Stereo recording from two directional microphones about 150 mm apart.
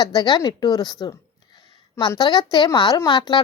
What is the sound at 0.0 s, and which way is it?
A woman's voice, 30° left (ahead or behind).